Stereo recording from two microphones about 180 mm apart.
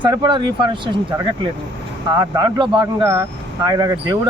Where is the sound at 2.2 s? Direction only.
20° right (ahead or behind).